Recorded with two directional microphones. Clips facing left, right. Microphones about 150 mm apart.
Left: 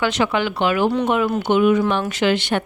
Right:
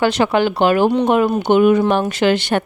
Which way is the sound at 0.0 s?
35° right (ahead or behind).